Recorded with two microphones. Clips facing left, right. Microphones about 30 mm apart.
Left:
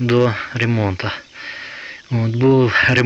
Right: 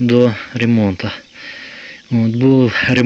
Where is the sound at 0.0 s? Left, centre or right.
Centre.